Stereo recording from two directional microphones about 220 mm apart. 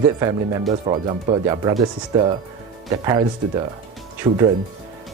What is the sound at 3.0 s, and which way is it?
Speech, 20° right (ahead or behind).